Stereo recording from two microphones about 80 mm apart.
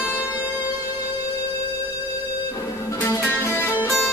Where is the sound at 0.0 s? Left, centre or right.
Left.